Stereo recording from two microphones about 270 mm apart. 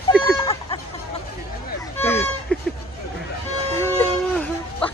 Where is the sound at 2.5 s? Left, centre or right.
Centre.